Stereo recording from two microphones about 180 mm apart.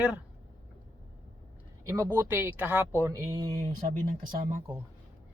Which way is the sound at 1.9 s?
15° right (ahead or behind).